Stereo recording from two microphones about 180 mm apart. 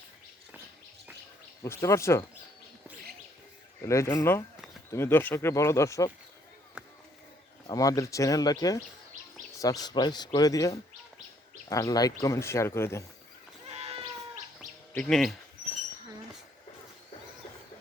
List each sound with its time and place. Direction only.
1.6 s speech: 15° left (ahead or behind)
3.8 s speech: 15° left (ahead or behind)
6.8 s a sound: 5° right (ahead or behind)
7.7 s speech: 20° left (ahead or behind)
13.7 s a sound: 35° right (ahead or behind)
14.9 s speech: 5° left (ahead or behind)